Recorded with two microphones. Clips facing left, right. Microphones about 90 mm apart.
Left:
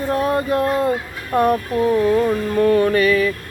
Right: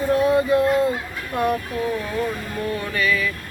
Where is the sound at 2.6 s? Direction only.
45° left (ahead or behind).